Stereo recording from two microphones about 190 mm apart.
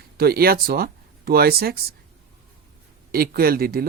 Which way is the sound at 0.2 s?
55° right (ahead or behind).